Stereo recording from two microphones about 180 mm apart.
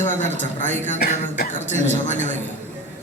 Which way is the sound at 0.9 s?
60° left (ahead or behind).